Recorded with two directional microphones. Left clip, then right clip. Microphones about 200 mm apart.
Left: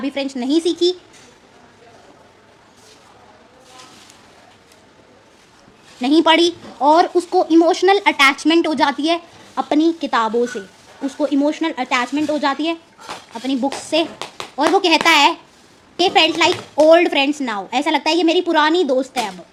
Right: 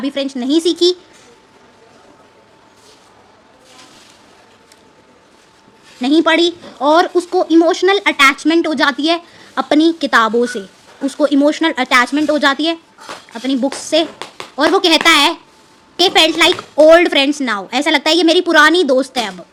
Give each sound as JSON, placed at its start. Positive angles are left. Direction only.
{"t": 0.0, "sound": "speech", "side_deg": -15}
{"t": 6.0, "sound": "a woman's voice", "side_deg": -10}